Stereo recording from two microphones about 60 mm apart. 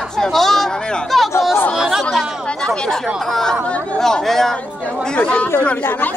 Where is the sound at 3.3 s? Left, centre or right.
Centre.